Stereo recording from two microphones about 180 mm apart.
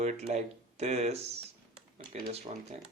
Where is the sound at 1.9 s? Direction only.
55° right (ahead or behind).